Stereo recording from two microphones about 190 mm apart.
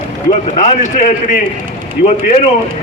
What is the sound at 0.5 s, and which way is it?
Speech, 40° left (ahead or behind).